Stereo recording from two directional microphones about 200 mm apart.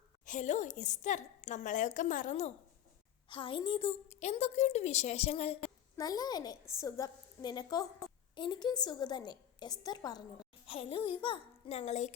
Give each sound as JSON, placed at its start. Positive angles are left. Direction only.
{"t": 0.3, "sound": "a woman's voice", "side_deg": 35}
{"t": 3.2, "sound": "a woman's voice", "side_deg": 25}